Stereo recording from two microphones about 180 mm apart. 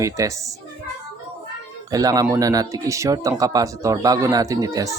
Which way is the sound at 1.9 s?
20° right (ahead or behind).